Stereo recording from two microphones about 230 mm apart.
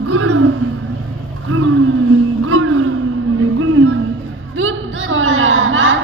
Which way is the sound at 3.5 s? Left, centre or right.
Right.